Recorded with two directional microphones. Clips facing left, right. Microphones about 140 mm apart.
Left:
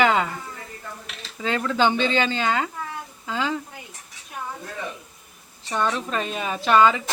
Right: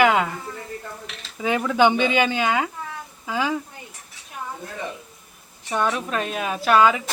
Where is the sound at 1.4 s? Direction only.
15° right (ahead or behind).